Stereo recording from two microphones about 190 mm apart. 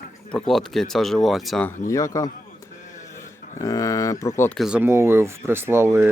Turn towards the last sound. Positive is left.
turn(degrees=-15)  # may be behind; listen again after turning